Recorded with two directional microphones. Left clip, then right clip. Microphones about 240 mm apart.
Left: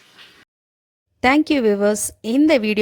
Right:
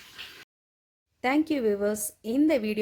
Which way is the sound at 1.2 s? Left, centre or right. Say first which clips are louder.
Left 10 dB; left.